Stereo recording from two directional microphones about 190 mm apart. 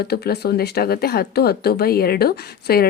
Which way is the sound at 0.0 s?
55° left (ahead or behind).